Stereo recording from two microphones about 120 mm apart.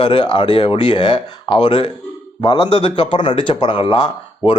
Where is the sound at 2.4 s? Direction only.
40° left (ahead or behind).